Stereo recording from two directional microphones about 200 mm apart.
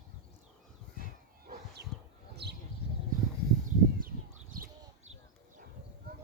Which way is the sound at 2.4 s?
55° right (ahead or behind).